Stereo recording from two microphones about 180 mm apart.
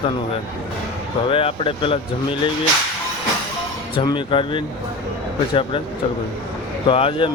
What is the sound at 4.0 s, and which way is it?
Speech, 25° left (ahead or behind).